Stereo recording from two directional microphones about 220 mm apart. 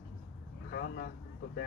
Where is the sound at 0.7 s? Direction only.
45° left (ahead or behind).